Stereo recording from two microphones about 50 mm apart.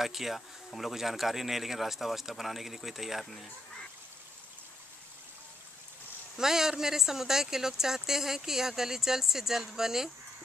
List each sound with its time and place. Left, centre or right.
0.0 s speech: centre
6.3 s speech: centre